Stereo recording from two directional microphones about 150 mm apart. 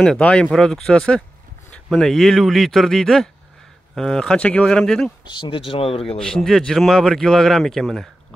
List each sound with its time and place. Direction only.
0.0 s speech: 5° left (ahead or behind)
5.3 s speech: 30° left (ahead or behind)
6.1 s speech: 5° left (ahead or behind)